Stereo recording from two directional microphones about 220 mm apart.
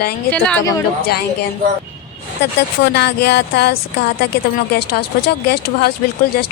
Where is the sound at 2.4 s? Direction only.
50° left (ahead or behind).